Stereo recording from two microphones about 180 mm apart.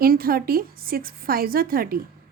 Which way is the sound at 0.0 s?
55° right (ahead or behind).